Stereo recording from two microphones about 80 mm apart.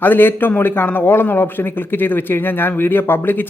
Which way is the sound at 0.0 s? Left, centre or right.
Left.